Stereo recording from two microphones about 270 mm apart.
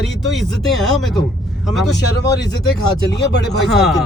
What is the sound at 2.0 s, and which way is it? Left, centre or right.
Speech, left.